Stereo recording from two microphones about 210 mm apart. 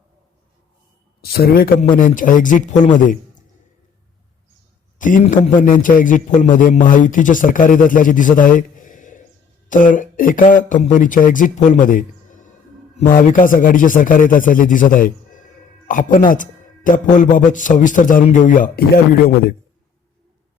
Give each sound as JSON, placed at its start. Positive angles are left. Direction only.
{"t": 1.2, "sound": "a man's voice", "side_deg": 45}
{"t": 4.9, "sound": "a man's voice", "side_deg": 40}